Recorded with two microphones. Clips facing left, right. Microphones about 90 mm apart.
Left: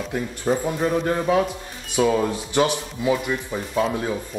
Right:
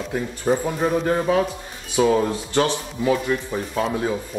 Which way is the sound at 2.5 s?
15° left (ahead or behind).